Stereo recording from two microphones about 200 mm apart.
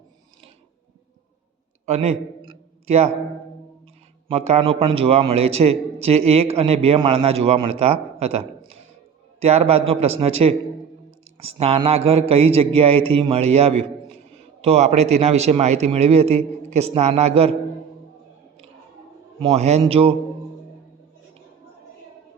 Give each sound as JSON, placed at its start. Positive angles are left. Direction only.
{"t": 1.9, "sound": "a sound", "side_deg": -30}
{"t": 4.3, "sound": "a man's voice", "side_deg": -30}
{"t": 19.4, "sound": "speech", "side_deg": -30}